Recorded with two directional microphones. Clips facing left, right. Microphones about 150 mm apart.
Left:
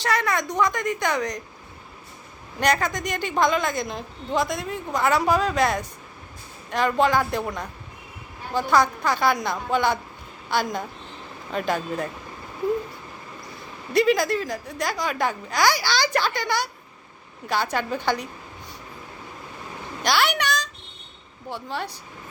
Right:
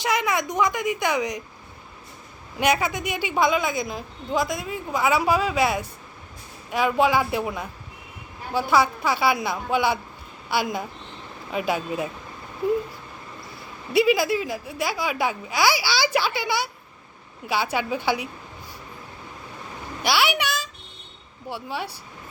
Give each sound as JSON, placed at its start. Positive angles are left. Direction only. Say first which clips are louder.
{"t": 0.0, "sound": "speech", "louder": "even", "side_deg": -10}
{"t": 2.6, "sound": "a woman's voice", "louder": "even", "side_deg": -10}
{"t": 13.9, "sound": "speech", "louder": "even", "side_deg": -5}
{"t": 20.0, "sound": "a sound", "louder": "even", "side_deg": -10}
{"t": 21.5, "sound": "speech", "louder": "even", "side_deg": -10}